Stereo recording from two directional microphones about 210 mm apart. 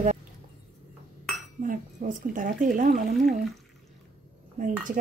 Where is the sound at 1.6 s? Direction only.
40° right (ahead or behind).